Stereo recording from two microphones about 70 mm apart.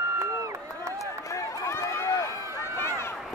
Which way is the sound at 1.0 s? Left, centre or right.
Left.